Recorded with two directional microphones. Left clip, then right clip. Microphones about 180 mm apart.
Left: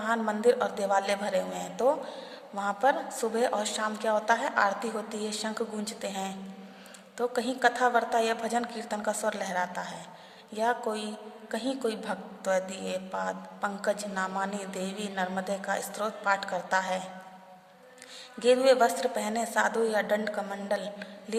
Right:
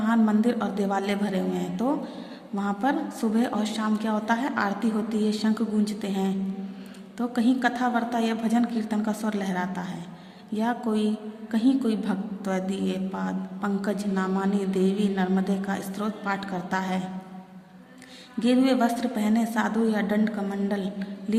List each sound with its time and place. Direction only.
0.0 s a woman's voice: 20° left (ahead or behind)
18.3 s a woman's voice: 20° left (ahead or behind)